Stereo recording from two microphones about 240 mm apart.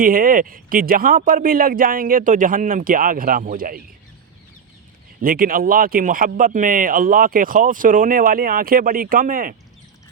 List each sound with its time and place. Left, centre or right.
0.0 s speech: right
5.2 s speech: right